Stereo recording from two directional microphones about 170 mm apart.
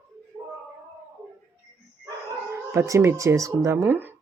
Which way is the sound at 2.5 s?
15° right (ahead or behind).